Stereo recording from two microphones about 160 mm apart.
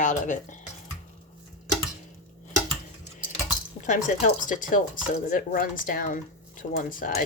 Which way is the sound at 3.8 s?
50° left (ahead or behind).